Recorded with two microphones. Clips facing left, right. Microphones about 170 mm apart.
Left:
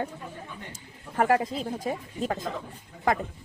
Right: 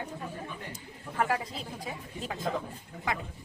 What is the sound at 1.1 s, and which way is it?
A woman's voice, 45° left (ahead or behind).